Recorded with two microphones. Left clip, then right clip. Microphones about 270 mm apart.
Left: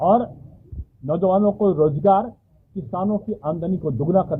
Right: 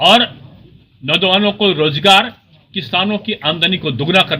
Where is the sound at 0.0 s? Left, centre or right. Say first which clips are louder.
Right 8 dB; right.